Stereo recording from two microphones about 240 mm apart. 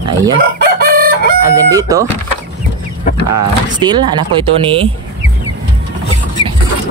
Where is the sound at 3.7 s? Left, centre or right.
Centre.